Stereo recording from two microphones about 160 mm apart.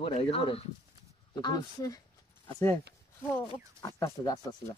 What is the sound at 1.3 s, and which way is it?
Speech, 25° left (ahead or behind).